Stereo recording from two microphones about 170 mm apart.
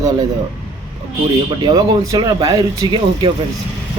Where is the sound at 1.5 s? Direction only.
25° right (ahead or behind).